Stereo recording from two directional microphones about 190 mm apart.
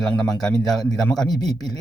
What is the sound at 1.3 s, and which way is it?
Speech, 20° left (ahead or behind).